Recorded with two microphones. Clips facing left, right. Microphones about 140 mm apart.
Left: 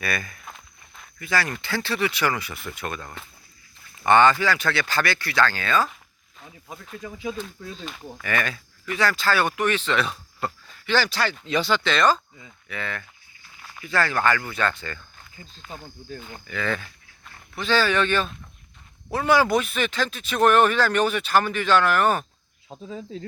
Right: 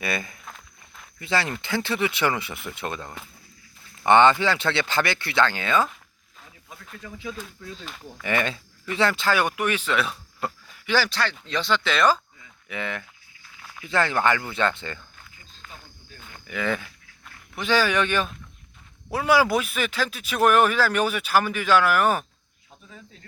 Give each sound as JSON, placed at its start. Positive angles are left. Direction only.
{"t": 0.0, "sound": "speech", "side_deg": -20}
{"t": 8.2, "sound": "speech", "side_deg": -20}
{"t": 11.1, "sound": "speech", "side_deg": 5}
{"t": 12.6, "sound": "speech", "side_deg": -15}
{"t": 16.5, "sound": "speech", "side_deg": -15}
{"t": 22.7, "sound": "speech", "side_deg": 90}